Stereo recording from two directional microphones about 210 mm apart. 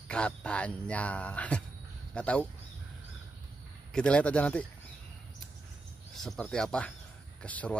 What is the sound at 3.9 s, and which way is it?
Speech, 5° left (ahead or behind).